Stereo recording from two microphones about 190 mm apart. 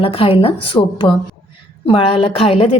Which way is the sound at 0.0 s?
30° left (ahead or behind).